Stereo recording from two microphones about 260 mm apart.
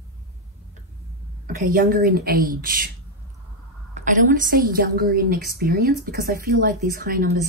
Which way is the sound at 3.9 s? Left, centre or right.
Right.